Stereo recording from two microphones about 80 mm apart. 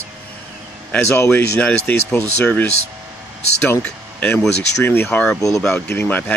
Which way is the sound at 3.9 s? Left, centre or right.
Left.